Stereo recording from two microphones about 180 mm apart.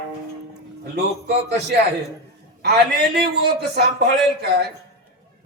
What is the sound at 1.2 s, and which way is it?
A man's voice, 65° right (ahead or behind).